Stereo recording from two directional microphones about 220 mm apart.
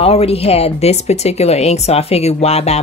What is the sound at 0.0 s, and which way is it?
Speech, 25° left (ahead or behind).